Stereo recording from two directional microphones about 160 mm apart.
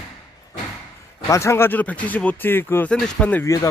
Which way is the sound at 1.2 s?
20° left (ahead or behind).